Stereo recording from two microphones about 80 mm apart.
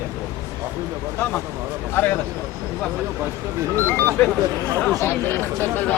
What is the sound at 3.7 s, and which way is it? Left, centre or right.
Speech, left.